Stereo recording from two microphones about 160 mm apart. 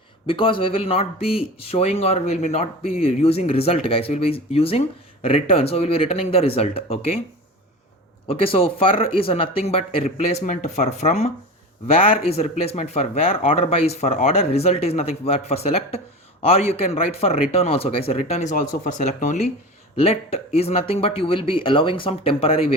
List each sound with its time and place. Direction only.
0.3 s speech: 30° left (ahead or behind)
8.3 s speech: 35° left (ahead or behind)